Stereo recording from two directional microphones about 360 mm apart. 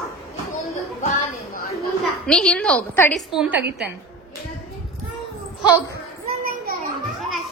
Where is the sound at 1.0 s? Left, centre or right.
Left.